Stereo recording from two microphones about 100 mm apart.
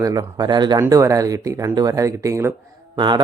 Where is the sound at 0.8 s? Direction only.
30° right (ahead or behind).